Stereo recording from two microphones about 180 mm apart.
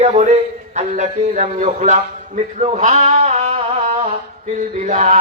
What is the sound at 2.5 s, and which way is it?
Male singing, 40° right (ahead or behind).